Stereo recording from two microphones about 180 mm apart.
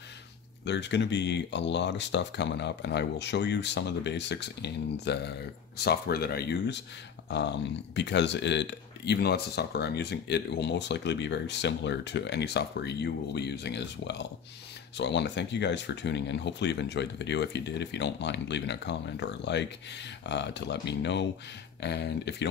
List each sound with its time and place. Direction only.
0.7 s speech: 75° left (ahead or behind)
7.2 s speech: 75° left (ahead or behind)